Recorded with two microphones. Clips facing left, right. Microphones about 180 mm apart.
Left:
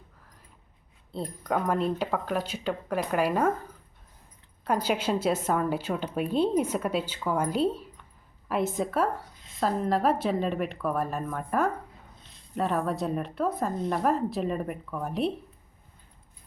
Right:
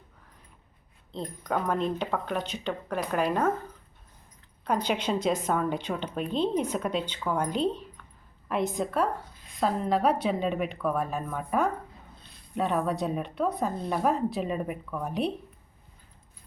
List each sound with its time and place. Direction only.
1.1 s speech: 5° left (ahead or behind)
4.6 s a woman's voice: 5° left (ahead or behind)
12.1 s a sound: 25° left (ahead or behind)
12.5 s speech: centre (ahead or behind)